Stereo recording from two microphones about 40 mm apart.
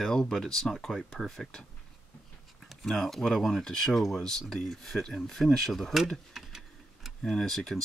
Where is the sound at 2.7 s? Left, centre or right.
Centre.